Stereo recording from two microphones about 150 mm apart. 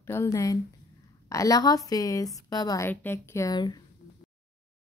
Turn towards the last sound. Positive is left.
turn(degrees=25)  # may be behind; listen again after turning